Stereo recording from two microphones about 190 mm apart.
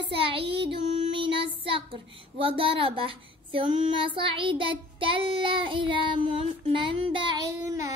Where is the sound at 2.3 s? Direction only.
30° right (ahead or behind).